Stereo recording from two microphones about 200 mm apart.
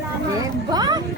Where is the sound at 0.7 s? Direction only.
20° right (ahead or behind).